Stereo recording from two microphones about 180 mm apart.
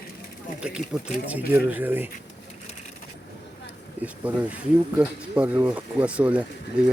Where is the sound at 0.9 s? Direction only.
5° right (ahead or behind).